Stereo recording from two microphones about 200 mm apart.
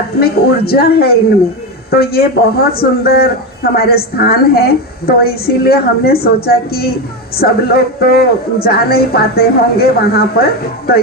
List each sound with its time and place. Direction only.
0.2 s speech: 50° left (ahead or behind)